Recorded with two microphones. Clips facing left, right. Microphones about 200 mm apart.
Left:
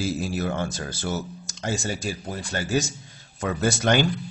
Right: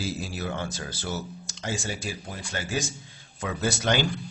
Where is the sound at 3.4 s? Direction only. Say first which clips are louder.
Left 4 dB; 50° left (ahead or behind).